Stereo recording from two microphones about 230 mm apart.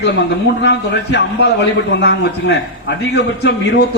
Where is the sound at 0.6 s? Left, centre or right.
Left.